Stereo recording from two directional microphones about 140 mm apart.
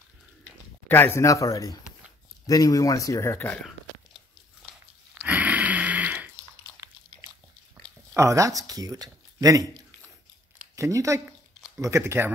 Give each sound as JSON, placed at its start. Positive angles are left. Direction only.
{"t": 0.8, "sound": "speech", "side_deg": 15}
{"t": 5.2, "sound": "a sound", "side_deg": -10}
{"t": 8.1, "sound": "speech", "side_deg": -20}
{"t": 10.8, "sound": "speech", "side_deg": -20}